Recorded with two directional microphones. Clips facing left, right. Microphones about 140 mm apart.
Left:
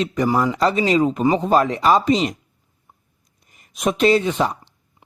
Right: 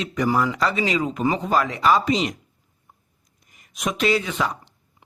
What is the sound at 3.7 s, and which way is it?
Speech, 35° left (ahead or behind).